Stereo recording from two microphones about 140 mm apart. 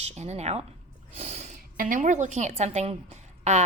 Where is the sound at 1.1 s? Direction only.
50° right (ahead or behind).